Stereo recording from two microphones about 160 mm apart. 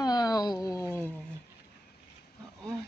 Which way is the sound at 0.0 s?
25° left (ahead or behind).